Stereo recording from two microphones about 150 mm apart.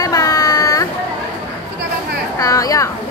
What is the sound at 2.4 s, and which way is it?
Speech, 20° left (ahead or behind).